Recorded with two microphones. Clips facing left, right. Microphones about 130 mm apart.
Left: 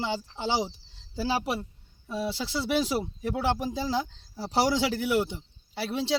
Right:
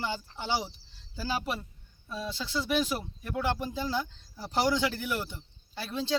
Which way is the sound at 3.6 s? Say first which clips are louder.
Left 3 dB; 90° left.